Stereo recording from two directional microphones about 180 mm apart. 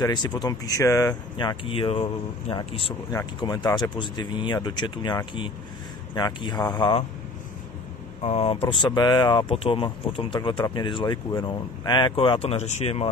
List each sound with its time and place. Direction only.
0.0 s speech: 25° left (ahead or behind)
3.1 s speech: 20° left (ahead or behind)
8.2 s speech: 35° left (ahead or behind)